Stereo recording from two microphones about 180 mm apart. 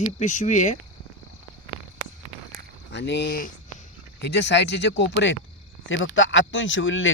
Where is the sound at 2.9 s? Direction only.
75° left (ahead or behind); by 3.5 s 55° left (ahead or behind).